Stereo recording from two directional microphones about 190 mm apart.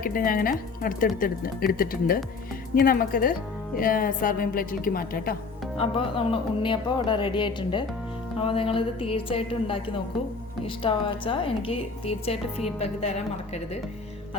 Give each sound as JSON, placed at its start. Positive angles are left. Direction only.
{"t": 0.0, "sound": "a woman's voice", "side_deg": 50}
{"t": 5.7, "sound": "a woman's voice", "side_deg": 30}